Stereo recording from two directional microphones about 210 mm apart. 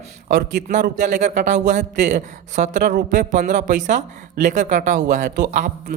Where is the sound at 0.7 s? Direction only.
35° right (ahead or behind).